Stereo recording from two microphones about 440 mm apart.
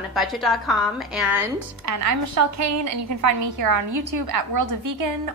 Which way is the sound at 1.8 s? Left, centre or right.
Right.